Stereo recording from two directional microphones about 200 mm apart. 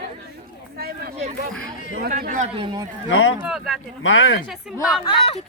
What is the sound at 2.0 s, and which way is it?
Speech, 45° right (ahead or behind).